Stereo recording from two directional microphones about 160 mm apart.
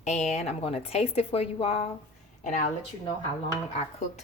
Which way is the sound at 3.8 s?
40° left (ahead or behind).